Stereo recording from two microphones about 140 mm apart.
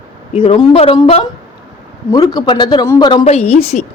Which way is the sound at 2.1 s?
25° left (ahead or behind).